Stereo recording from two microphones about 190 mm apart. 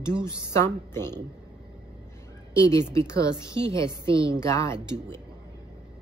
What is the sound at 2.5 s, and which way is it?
A woman's voice, 15° left (ahead or behind).